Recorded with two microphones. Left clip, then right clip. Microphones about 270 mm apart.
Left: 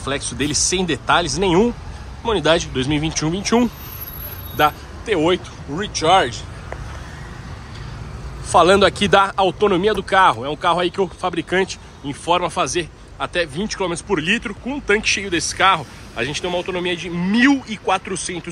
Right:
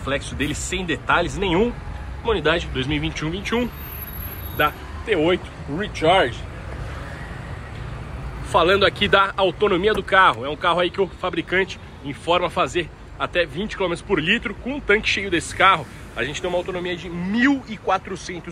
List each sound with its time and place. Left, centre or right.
0.0 s speech: centre
8.5 s speech: centre